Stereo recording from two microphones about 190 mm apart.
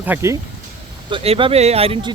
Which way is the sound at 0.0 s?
10° right (ahead or behind).